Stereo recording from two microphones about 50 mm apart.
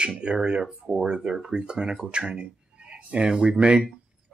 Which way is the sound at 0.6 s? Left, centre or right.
Centre.